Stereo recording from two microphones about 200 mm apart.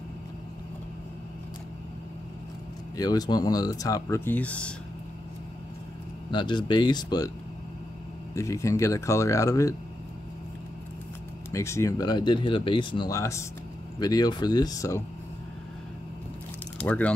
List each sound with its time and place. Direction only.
3.0 s speech: 20° left (ahead or behind)
6.3 s speech: 25° left (ahead or behind)
8.4 s speech: 15° left (ahead or behind)
11.5 s speech: 15° left (ahead or behind)
16.8 s speech: 5° left (ahead or behind)